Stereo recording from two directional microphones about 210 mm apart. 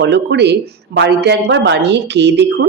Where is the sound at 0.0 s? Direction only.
55° right (ahead or behind).